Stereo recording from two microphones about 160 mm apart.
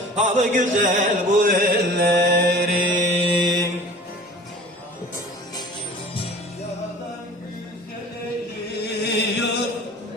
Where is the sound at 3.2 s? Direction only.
30° right (ahead or behind).